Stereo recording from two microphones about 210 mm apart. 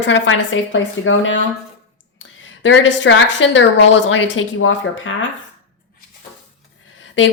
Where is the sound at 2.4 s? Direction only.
65° left (ahead or behind).